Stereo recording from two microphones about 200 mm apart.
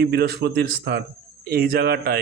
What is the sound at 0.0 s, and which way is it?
Speech, 55° right (ahead or behind).